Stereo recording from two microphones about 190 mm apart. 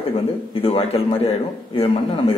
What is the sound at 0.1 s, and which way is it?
A man's voice, 30° left (ahead or behind).